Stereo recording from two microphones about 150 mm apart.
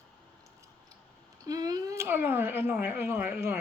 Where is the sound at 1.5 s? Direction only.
25° right (ahead or behind).